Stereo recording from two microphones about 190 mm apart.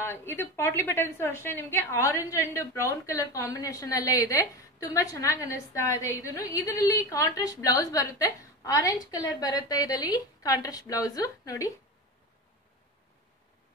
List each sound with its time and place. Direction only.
0.0 s a woman's voice: 15° left (ahead or behind)